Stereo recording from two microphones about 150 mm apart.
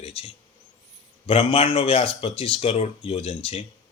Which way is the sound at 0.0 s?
40° left (ahead or behind).